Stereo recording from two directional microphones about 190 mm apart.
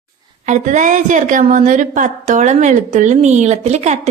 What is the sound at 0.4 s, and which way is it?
A woman's voice, 40° right (ahead or behind).